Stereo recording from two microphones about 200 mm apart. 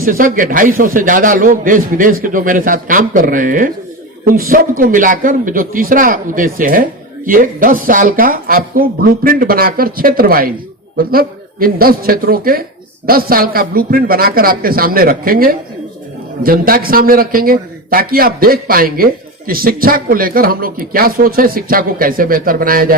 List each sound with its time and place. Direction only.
0.0 s a man's voice: 45° right (ahead or behind)